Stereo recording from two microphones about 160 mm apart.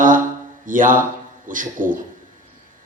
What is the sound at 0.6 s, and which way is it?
Speech, 55° right (ahead or behind).